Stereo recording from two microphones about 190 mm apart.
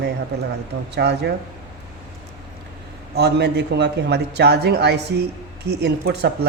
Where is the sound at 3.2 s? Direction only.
60° right (ahead or behind).